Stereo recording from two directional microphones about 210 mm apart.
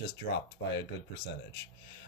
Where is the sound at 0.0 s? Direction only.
50° left (ahead or behind).